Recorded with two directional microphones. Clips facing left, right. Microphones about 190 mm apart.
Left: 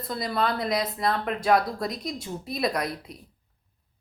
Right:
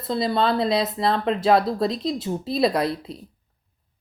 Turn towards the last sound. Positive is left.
turn(degrees=-30)  # may be behind; listen again after turning